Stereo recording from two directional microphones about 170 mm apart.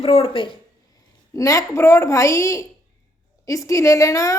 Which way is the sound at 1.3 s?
20° left (ahead or behind).